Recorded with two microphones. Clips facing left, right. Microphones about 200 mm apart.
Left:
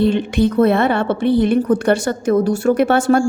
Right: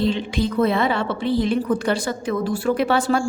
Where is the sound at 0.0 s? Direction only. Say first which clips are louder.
Left 6 dB; 55° left (ahead or behind).